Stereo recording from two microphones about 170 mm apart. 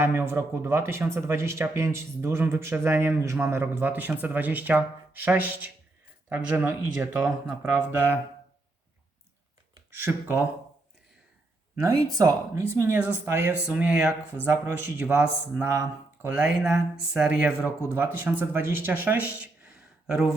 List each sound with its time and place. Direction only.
0.0 s speech: 15° right (ahead or behind)
10.0 s speech: 10° right (ahead or behind)
11.8 s speech: 20° right (ahead or behind); by 20.3 s 5° right (ahead or behind)